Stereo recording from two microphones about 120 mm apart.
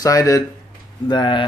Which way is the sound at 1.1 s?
40° left (ahead or behind).